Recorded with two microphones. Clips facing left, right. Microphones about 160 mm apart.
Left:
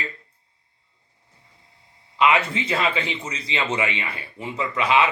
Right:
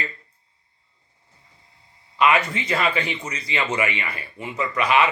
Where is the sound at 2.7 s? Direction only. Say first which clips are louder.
Right 1 dB; 25° left (ahead or behind).